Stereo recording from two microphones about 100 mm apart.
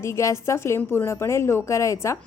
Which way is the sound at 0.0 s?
30° left (ahead or behind).